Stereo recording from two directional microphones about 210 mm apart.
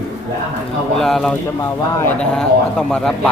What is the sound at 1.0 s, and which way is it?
Speech, centre (ahead or behind).